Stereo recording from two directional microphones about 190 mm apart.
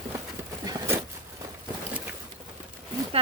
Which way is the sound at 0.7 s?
15° right (ahead or behind).